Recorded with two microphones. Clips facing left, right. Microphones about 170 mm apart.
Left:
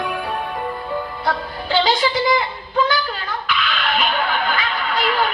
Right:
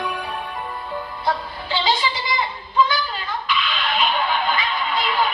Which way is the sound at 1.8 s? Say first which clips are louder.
Left 5 dB; 45° left (ahead or behind).